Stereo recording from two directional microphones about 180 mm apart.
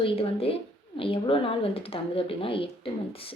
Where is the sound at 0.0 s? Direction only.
30° left (ahead or behind).